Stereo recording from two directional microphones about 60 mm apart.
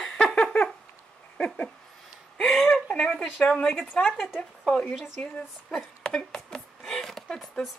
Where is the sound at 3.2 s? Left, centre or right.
Left.